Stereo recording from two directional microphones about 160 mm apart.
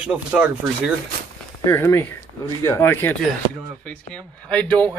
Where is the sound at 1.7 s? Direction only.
15° left (ahead or behind).